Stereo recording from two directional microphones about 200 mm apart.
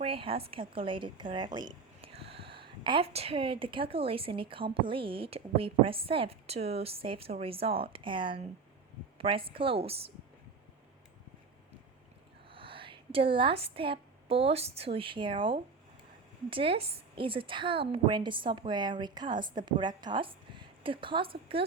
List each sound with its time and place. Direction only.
0.0 s a woman's voice: 30° right (ahead or behind)
12.5 s a woman's voice: 25° right (ahead or behind)